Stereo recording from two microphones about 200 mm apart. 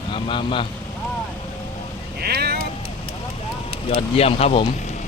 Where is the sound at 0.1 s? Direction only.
25° left (ahead or behind).